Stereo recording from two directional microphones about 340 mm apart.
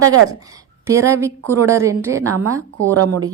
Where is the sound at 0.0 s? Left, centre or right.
Right.